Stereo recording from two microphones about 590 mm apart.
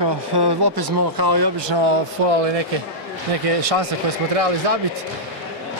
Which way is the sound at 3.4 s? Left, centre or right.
Right.